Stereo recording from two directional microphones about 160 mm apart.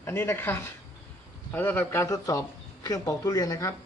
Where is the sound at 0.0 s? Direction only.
15° left (ahead or behind).